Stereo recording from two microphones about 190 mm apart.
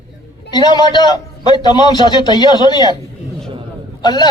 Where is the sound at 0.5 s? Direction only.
20° left (ahead or behind).